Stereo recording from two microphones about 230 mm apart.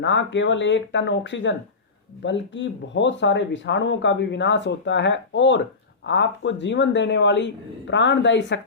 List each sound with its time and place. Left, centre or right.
0.0 s speech: left